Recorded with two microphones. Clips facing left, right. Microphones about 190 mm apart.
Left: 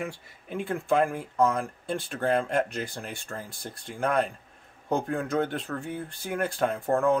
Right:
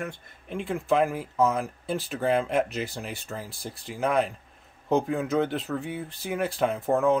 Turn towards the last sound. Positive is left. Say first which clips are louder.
# right 1 dB
turn(degrees=-5)  # may be behind; listen again after turning